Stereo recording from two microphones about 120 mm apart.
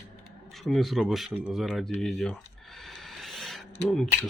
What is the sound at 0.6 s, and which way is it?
Speech, centre (ahead or behind).